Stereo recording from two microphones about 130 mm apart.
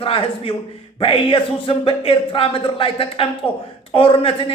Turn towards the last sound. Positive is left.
turn(degrees=45)  # may be behind; listen again after turning